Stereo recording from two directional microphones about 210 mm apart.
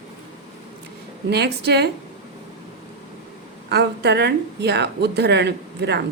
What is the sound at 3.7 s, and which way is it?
A woman's voice, 50° right (ahead or behind).